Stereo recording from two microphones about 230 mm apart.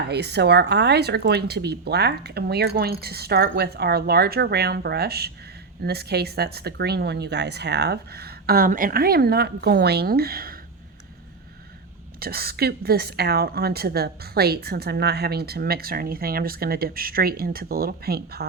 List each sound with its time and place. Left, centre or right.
0.1 s a woman's voice: right
12.2 s a woman's voice: right